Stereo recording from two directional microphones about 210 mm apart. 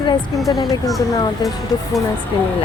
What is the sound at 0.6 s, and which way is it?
Speech, 15° left (ahead or behind).